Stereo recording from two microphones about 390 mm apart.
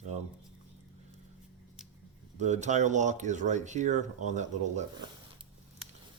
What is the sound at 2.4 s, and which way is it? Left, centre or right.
Speech, centre.